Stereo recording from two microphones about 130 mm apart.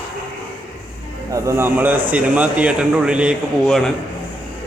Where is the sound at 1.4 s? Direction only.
15° right (ahead or behind); by 3.9 s centre (ahead or behind).